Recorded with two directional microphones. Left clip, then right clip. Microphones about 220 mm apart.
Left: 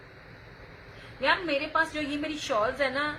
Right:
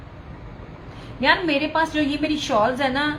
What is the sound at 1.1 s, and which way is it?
A woman's voice, 25° left (ahead or behind).